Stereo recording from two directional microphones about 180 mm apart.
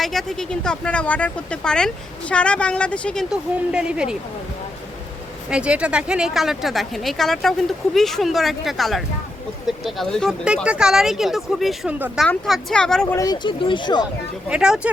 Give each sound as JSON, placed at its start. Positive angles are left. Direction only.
{"t": 0.0, "sound": "a woman's voice", "side_deg": 0}
{"t": 5.5, "sound": "a woman's voice", "side_deg": -5}
{"t": 13.1, "sound": "speech", "side_deg": 20}
{"t": 14.5, "sound": "a woman's voice", "side_deg": -5}